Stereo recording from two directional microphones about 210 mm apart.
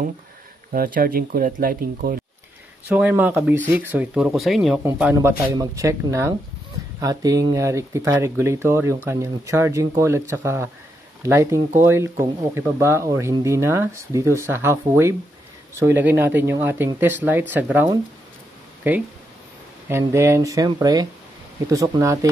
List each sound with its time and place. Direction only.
0.7 s speech: 40° right (ahead or behind)
2.9 s speech: 5° right (ahead or behind)
19.9 s speech: 10° right (ahead or behind)